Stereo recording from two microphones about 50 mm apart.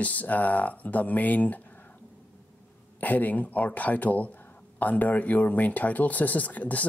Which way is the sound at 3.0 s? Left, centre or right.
Left.